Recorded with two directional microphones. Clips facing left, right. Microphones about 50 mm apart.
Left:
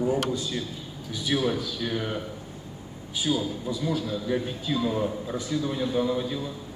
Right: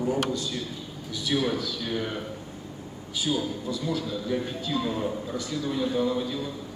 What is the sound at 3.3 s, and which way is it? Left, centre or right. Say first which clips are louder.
A man's voice: left 1 dB; centre.